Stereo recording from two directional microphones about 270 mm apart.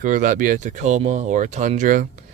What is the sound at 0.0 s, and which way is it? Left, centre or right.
Speech, right.